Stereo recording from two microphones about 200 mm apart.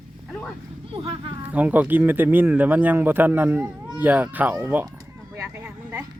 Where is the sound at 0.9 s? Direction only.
25° right (ahead or behind).